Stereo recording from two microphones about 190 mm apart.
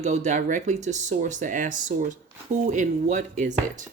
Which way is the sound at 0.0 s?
35° right (ahead or behind).